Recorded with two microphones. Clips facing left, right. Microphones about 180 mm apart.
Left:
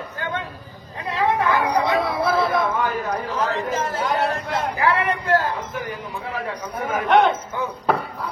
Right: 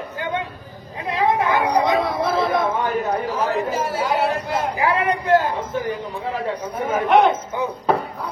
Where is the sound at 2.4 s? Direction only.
25° right (ahead or behind).